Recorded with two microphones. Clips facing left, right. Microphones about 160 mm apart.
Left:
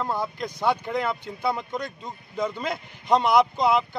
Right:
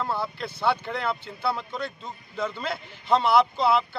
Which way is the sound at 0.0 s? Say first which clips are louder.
Left 1 dB; 10° left (ahead or behind).